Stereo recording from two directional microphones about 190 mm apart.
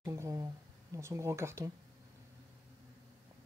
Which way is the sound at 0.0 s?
15° right (ahead or behind).